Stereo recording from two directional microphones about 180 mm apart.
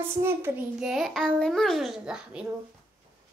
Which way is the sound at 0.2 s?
10° right (ahead or behind).